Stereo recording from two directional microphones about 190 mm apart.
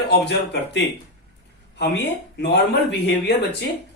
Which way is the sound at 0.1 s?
65° left (ahead or behind).